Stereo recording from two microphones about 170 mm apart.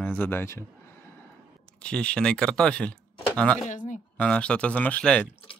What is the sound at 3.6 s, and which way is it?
Speech, 45° left (ahead or behind).